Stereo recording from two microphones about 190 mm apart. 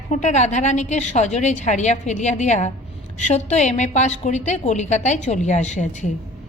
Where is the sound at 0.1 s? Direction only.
40° left (ahead or behind).